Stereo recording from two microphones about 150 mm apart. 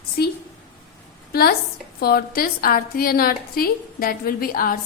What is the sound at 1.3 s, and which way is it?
A woman's voice, 90° left.